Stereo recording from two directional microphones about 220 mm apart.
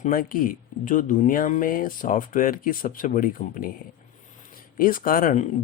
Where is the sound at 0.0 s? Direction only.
40° left (ahead or behind).